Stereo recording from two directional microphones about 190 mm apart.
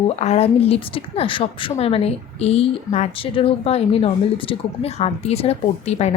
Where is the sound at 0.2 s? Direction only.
35° left (ahead or behind).